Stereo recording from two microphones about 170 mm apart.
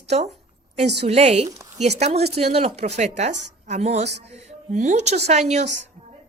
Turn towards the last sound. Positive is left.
turn(degrees=-40)  # may be behind; listen again after turning